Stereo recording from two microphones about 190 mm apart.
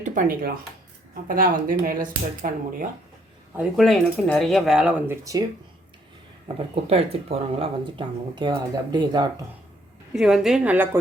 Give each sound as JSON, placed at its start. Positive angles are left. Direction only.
{"t": 0.0, "sound": "speech", "side_deg": -45}
{"t": 3.5, "sound": "speech", "side_deg": -5}
{"t": 6.9, "sound": "speech", "side_deg": -30}
{"t": 10.1, "sound": "speech", "side_deg": -5}